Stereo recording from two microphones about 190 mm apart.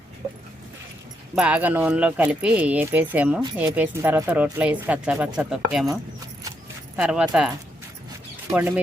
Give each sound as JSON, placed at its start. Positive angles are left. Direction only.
{"t": 0.2, "sound": "dog", "side_deg": -15}
{"t": 1.4, "sound": "speech", "side_deg": -5}